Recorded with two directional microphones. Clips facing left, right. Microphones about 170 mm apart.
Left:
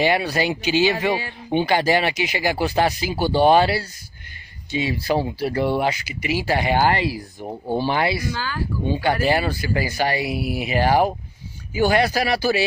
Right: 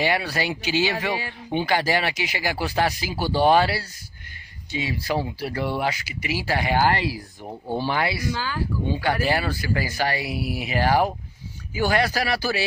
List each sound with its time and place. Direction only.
0.0 s speech: 20° left (ahead or behind)
8.3 s speech: 15° right (ahead or behind)
8.8 s speech: 20° left (ahead or behind)